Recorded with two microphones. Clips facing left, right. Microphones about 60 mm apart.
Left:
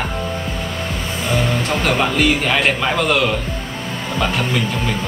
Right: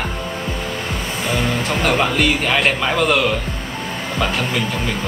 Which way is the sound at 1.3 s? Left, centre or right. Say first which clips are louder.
Left 1 dB; centre.